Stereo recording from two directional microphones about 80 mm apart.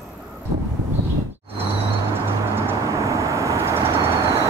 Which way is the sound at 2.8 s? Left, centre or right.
Right.